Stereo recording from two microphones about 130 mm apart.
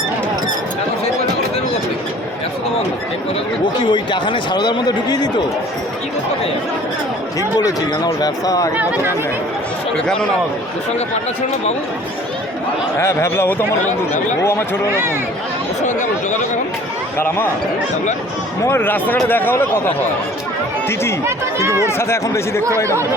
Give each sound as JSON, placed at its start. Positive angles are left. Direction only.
{"t": 3.8, "sound": "speech", "side_deg": 35}
{"t": 7.3, "sound": "speech", "side_deg": 30}
{"t": 8.8, "sound": "speech", "side_deg": -10}
{"t": 13.0, "sound": "speech", "side_deg": 20}
{"t": 17.2, "sound": "speech", "side_deg": 15}
{"t": 18.6, "sound": "speech", "side_deg": 15}
{"t": 21.2, "sound": "speech", "side_deg": -20}
{"t": 21.8, "sound": "speech", "side_deg": 20}